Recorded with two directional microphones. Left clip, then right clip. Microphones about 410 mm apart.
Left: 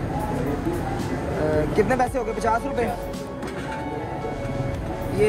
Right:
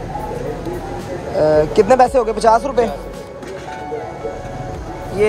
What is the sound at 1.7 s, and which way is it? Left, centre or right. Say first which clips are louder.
Speech: right 10 dB; centre.